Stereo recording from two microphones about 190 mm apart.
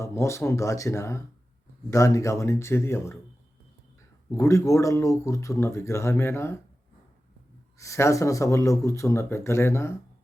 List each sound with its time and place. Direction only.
0.0 s speech: 15° left (ahead or behind)
4.3 s speech: 15° left (ahead or behind)
7.8 s speech: 15° left (ahead or behind)